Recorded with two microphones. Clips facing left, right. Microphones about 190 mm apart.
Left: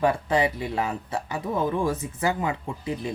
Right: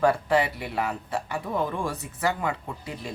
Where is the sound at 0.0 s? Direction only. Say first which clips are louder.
Even; 20° left (ahead or behind).